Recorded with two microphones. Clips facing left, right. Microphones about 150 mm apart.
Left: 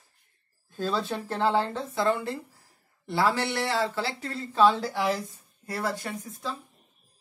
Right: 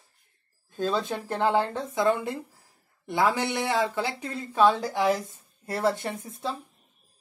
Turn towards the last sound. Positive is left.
turn(degrees=-25)  # may be behind; listen again after turning